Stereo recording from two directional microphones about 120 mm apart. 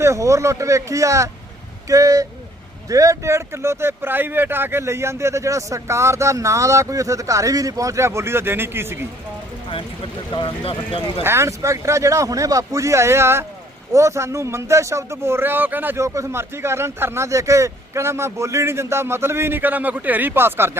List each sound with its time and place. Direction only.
0.0 s speech: 25° right (ahead or behind)
10.3 s speech: 50° left (ahead or behind)
11.2 s speech: 20° right (ahead or behind)